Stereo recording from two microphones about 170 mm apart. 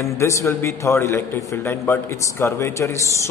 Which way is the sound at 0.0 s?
15° left (ahead or behind).